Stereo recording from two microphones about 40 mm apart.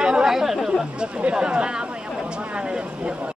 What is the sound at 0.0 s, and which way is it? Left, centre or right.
Chatter, right.